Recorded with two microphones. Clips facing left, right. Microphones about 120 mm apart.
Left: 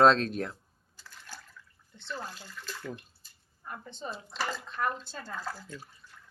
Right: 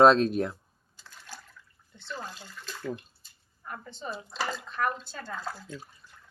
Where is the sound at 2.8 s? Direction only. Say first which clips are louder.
Right 6 dB; 5° right (ahead or behind).